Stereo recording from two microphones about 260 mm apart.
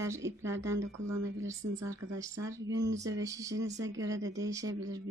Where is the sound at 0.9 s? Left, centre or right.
Right.